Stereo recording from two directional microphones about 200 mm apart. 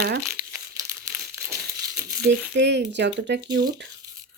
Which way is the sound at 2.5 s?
60° right (ahead or behind).